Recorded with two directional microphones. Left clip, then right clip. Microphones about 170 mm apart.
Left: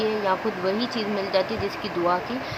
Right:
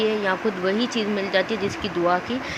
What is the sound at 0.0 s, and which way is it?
Speech, 20° right (ahead or behind).